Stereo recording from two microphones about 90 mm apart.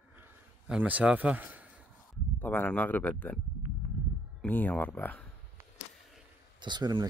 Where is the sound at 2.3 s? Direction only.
20° left (ahead or behind).